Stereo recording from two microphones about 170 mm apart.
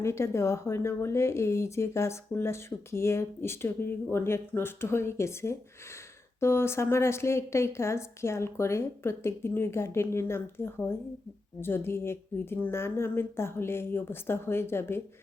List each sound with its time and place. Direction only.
0.0 s speech: 15° left (ahead or behind)